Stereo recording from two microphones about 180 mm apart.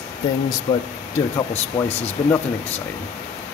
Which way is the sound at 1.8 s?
30° left (ahead or behind).